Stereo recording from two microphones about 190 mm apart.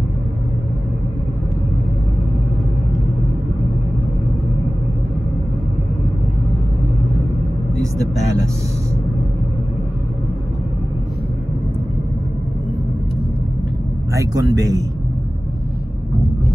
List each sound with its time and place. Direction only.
14.1 s a man's voice: 15° right (ahead or behind)